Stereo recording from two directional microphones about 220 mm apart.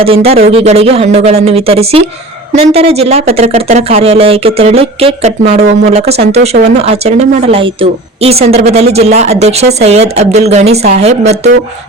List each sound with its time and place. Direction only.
0.0 s speech: 25° right (ahead or behind)